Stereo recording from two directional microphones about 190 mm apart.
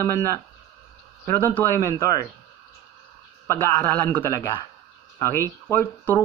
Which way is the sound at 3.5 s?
10° left (ahead or behind).